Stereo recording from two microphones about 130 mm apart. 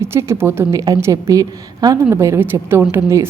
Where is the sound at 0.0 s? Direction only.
20° right (ahead or behind).